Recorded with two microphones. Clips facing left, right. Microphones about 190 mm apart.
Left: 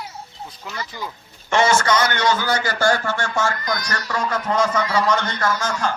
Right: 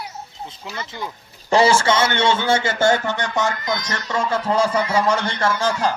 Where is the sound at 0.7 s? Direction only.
25° right (ahead or behind).